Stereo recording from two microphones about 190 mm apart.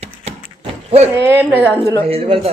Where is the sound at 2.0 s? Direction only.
30° right (ahead or behind).